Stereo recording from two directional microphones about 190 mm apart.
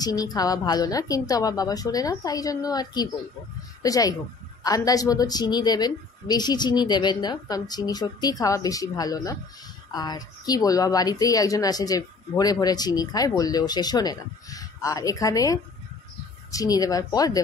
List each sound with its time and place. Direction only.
0.0 s a woman's voice: 20° left (ahead or behind)